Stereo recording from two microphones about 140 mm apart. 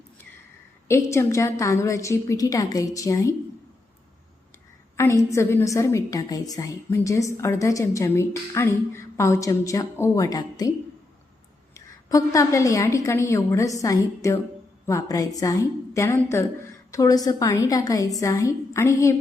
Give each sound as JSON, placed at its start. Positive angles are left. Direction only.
{"t": 0.9, "sound": "a woman's voice", "side_deg": 20}
{"t": 4.9, "sound": "a woman's voice", "side_deg": 20}
{"t": 11.7, "sound": "a woman's voice", "side_deg": 25}